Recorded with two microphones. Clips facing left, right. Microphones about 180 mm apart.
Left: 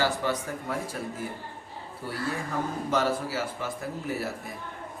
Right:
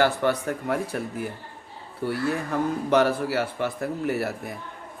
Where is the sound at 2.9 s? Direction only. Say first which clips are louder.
Right 6 dB; 65° right (ahead or behind).